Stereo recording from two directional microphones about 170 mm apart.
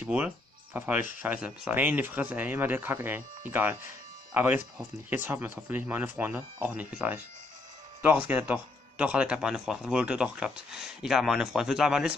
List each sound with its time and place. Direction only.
0.0 s speech: 10° right (ahead or behind)
8.3 s speech: 10° right (ahead or behind)